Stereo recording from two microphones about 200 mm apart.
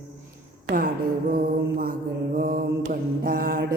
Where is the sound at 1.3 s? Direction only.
45° right (ahead or behind).